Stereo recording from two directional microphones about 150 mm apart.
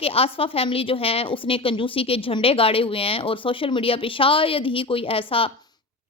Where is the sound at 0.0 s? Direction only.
40° left (ahead or behind).